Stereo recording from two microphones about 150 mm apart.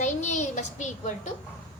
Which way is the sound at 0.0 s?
50° left (ahead or behind).